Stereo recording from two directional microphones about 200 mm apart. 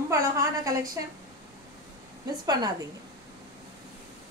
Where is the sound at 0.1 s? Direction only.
15° right (ahead or behind).